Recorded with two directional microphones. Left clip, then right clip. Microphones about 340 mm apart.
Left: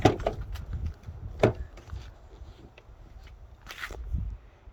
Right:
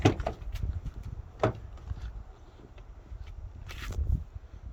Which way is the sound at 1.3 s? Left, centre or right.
Left.